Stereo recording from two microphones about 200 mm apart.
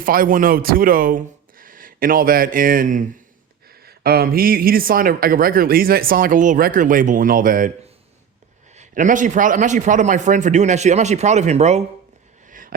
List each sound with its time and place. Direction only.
0.0 s speech: 45° right (ahead or behind)
8.7 s a man's voice: 35° right (ahead or behind)
12.5 s a sound: 40° right (ahead or behind)